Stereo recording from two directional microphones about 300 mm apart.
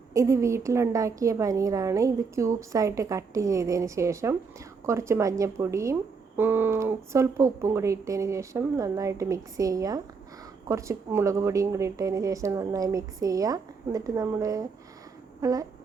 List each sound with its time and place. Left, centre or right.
0.1 s speech: centre